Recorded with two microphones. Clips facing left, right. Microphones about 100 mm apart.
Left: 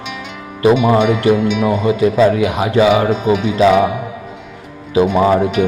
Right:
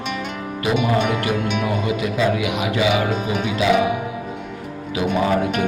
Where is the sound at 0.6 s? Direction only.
35° left (ahead or behind).